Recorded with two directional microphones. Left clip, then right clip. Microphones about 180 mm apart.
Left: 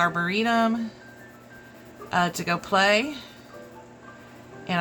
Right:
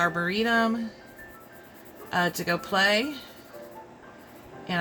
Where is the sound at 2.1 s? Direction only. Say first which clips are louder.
Left 2 dB; 20° left (ahead or behind).